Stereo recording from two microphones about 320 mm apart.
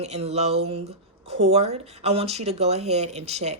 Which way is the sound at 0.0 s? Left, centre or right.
Centre.